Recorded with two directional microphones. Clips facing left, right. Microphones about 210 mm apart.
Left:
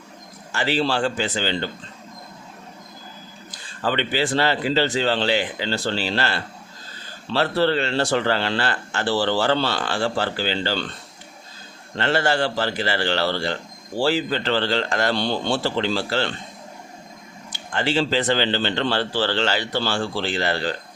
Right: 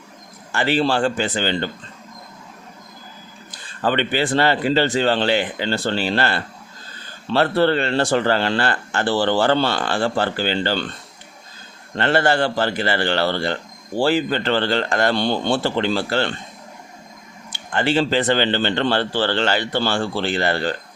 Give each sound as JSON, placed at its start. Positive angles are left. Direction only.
{"t": 0.5, "sound": "speech", "side_deg": -55}
{"t": 3.8, "sound": "speech", "side_deg": -55}
{"t": 11.9, "sound": "speech", "side_deg": -55}
{"t": 17.7, "sound": "speech", "side_deg": -55}